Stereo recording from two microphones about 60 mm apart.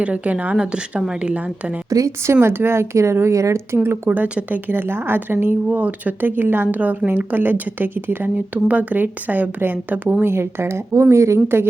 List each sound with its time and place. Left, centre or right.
0.0 s speech: right
1.9 s speech: right
2.2 s speech: right
4.1 s speech: right
8.5 s speech: right
10.2 s speech: right